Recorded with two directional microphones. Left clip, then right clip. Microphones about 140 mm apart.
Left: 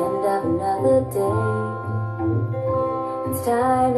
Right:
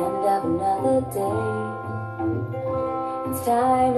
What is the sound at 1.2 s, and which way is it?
Music, 20° right (ahead or behind).